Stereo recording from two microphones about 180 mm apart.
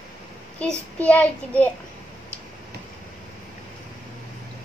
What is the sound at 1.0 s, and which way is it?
Child singing, 5° left (ahead or behind).